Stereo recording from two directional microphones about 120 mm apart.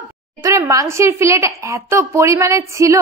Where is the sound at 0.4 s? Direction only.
25° right (ahead or behind).